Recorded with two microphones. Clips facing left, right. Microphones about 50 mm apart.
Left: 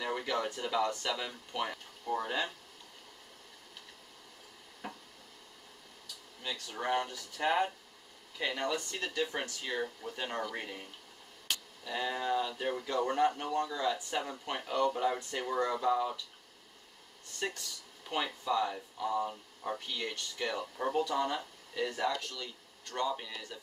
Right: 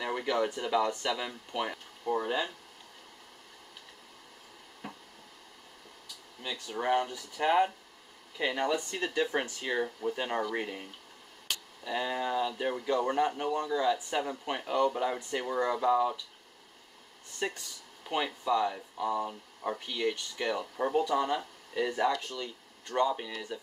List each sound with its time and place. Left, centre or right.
0.0 s a sound: centre
0.6 s speech: centre
6.4 s speech: centre
17.4 s speech: centre